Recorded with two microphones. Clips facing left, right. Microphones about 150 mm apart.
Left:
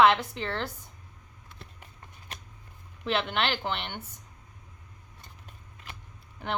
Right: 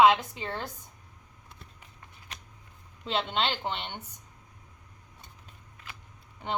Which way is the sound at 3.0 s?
70° left (ahead or behind).